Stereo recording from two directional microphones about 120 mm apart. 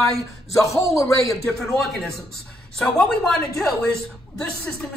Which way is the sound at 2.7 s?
5° left (ahead or behind).